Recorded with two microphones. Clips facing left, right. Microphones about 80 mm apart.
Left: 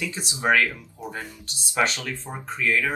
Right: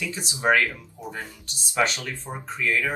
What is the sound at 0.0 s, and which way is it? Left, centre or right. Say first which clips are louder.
Speech: left 1 dB; left.